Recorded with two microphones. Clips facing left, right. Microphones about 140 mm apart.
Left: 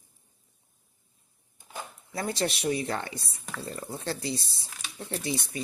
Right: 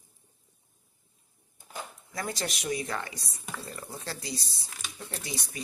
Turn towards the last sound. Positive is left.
turn(degrees=25)  # may be behind; listen again after turning